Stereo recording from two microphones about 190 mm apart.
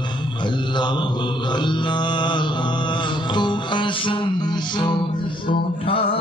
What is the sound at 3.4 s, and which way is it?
Music, 25° left (ahead or behind).